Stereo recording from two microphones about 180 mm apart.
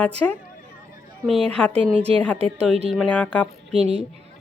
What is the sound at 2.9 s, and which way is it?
Speech, 5° left (ahead or behind).